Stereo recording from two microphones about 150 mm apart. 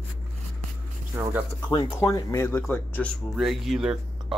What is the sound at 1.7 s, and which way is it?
Speech, 35° left (ahead or behind).